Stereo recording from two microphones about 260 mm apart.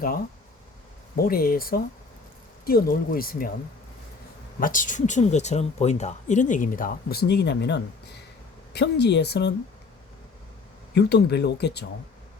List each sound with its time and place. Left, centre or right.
1.1 s speech: left
4.6 s speech: left
10.9 s speech: left